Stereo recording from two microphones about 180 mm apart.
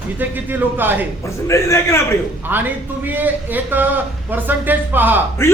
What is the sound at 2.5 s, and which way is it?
A man's voice, 10° right (ahead or behind).